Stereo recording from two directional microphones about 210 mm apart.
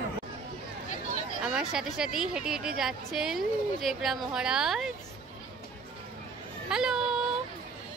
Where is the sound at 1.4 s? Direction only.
5° right (ahead or behind).